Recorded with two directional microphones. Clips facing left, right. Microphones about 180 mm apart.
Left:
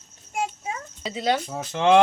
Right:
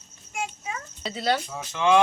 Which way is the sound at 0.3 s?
35° left (ahead or behind).